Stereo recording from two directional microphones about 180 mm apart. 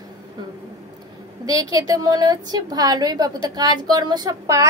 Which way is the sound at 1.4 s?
20° right (ahead or behind).